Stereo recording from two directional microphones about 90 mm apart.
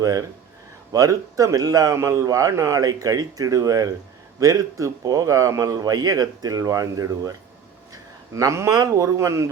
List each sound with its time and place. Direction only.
0.0 s a man's voice: 40° right (ahead or behind)